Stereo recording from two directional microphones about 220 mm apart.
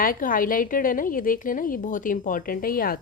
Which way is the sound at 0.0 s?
40° left (ahead or behind).